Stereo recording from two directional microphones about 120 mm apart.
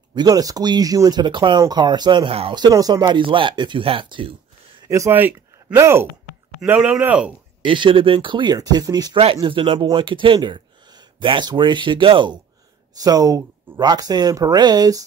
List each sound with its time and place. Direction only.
0.1 s speech: 35° right (ahead or behind); by 2.5 s 50° right (ahead or behind)
2.5 s speech: 35° right (ahead or behind)
4.8 s speech: 25° right (ahead or behind)
6.6 s speech: 10° right (ahead or behind)
7.6 s speech: 45° right (ahead or behind)
9.2 s speech: 50° right (ahead or behind)
13.0 s speech: 30° right (ahead or behind)